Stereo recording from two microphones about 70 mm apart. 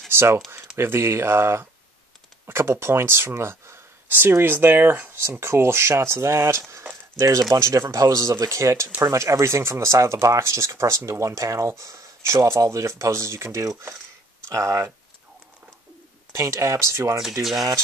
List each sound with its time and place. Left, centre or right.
0.1 s speech: right
7.5 s speech: right
16.3 s speech: right
17.2 s speech: centre